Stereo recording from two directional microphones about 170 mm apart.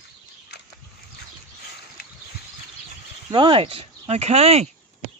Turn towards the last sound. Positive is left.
turn(degrees=-35)  # may be behind; listen again after turning